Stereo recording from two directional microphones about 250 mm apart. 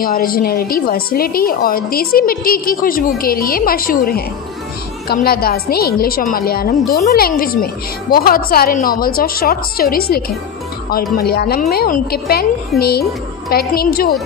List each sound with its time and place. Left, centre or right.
0.0 s a woman's voice: left